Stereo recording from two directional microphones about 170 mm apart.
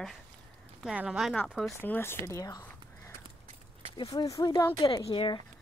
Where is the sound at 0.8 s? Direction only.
5° right (ahead or behind).